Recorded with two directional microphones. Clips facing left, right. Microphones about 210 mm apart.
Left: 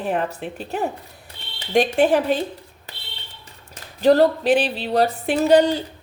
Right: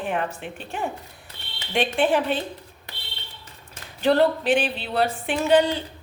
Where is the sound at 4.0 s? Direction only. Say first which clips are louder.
Left 4 dB; 40° left (ahead or behind).